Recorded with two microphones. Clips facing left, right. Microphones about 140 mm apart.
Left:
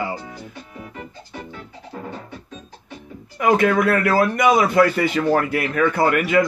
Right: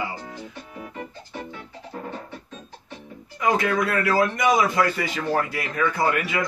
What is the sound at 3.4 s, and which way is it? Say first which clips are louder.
Speech: left 5 dB; 60° left (ahead or behind).